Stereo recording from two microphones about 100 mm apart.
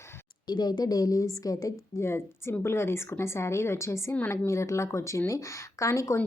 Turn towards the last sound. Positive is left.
turn(degrees=30)  # may be behind; listen again after turning